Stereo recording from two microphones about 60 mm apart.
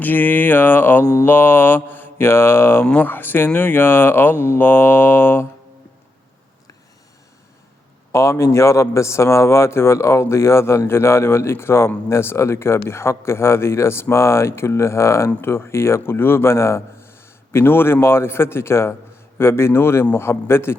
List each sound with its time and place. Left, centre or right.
0.0 s mantra: left
8.1 s speech: left
15.4 s speech: left